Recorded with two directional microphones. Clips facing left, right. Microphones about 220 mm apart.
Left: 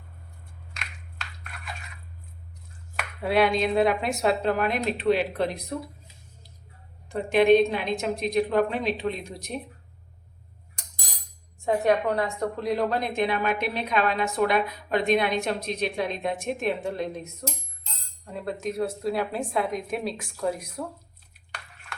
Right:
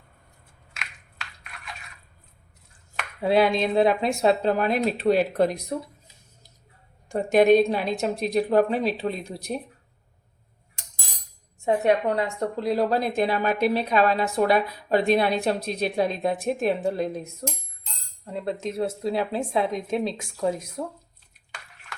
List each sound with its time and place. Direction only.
3.2 s a woman's voice: 25° right (ahead or behind); by 5.5 s 40° right (ahead or behind)
7.1 s a woman's voice: 45° right (ahead or behind)
11.6 s a woman's voice: 25° right (ahead or behind)
18.3 s a woman's voice: 25° right (ahead or behind)